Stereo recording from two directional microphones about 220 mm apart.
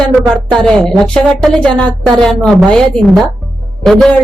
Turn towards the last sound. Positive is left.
turn(degrees=0)  # may be behind; listen again after turning